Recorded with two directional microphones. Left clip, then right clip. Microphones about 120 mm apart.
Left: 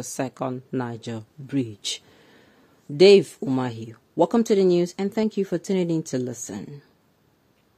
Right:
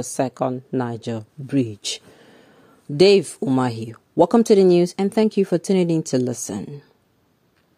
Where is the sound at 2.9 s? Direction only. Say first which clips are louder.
Even; 55° right (ahead or behind).